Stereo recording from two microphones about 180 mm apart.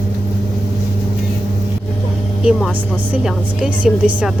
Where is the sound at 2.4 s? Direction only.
5° right (ahead or behind).